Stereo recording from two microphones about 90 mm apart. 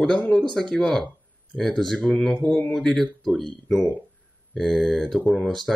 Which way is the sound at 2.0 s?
15° left (ahead or behind).